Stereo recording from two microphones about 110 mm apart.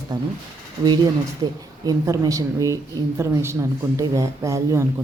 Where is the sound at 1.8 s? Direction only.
30° right (ahead or behind).